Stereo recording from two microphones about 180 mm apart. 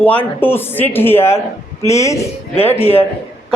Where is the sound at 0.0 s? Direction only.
10° left (ahead or behind).